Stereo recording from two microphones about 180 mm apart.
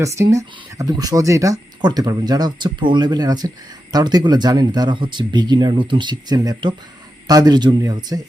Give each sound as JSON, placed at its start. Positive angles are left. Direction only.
{"t": 0.0, "sound": "speech", "side_deg": -15}